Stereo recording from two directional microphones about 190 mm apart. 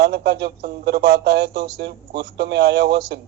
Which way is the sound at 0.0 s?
60° right (ahead or behind).